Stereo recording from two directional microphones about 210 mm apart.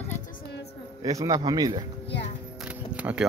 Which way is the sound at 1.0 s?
15° right (ahead or behind).